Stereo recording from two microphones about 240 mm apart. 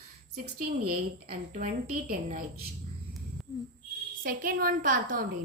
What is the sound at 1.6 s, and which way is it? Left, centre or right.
Speech, right.